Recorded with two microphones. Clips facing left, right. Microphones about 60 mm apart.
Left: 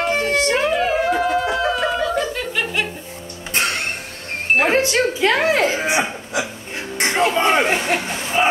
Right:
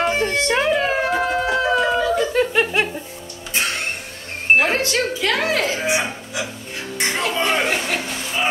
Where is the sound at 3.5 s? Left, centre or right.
Left.